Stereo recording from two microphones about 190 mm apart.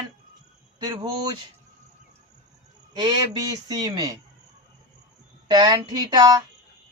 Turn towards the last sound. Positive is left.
turn(degrees=-20)  # may be behind; listen again after turning